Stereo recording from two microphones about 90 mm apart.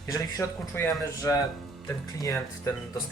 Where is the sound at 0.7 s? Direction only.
25° left (ahead or behind).